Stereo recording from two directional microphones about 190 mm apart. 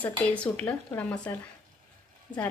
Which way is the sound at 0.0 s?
5° left (ahead or behind).